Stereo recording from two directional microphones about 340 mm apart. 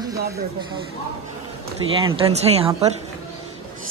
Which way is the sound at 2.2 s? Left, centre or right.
Centre.